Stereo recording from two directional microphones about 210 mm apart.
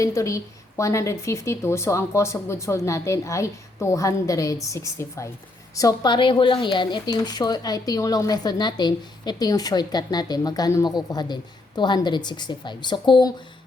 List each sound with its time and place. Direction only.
0.0 s a woman's voice: 15° left (ahead or behind)